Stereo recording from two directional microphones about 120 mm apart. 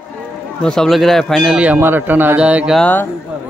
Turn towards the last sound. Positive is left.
turn(degrees=10)  # may be behind; listen again after turning